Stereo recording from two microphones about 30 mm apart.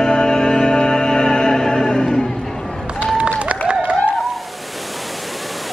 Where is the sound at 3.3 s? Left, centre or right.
Right.